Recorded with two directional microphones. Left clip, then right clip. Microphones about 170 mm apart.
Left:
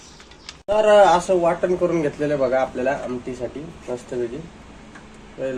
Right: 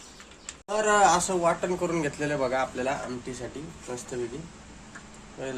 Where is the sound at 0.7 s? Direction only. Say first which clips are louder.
Left 8 dB; 10° right (ahead or behind).